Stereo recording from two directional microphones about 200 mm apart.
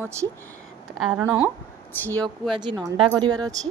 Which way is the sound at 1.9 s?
10° left (ahead or behind).